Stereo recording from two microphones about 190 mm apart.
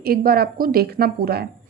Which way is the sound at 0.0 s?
50° right (ahead or behind).